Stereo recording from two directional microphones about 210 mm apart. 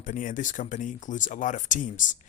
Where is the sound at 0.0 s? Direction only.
40° left (ahead or behind).